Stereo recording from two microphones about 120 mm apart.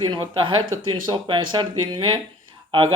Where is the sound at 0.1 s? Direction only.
40° right (ahead or behind).